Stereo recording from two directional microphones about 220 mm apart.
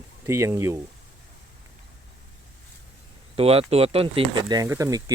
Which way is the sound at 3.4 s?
25° right (ahead or behind).